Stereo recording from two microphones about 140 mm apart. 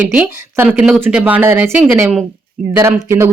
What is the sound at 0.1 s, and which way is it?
A woman's voice, 10° right (ahead or behind).